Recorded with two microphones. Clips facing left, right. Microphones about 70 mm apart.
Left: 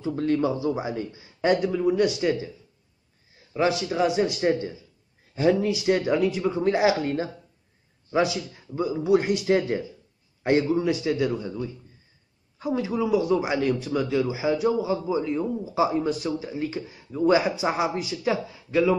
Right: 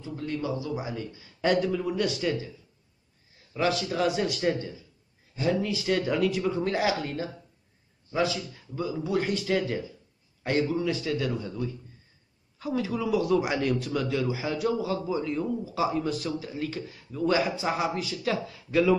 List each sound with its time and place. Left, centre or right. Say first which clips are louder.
0.1 s speech: left 8 dB; left
0.6 s speech: left 6 dB; left; by 2.2 s centre
3.5 s a man's voice: left 3 dB; left
5.3 s speech: left 6 dB; left
5.9 s a man's voice: left 4 dB; left
6.1 s speech: left 3 dB; centre
8.1 s a man's voice: left 4 dB; centre
12.6 s speech: left 3 dB; centre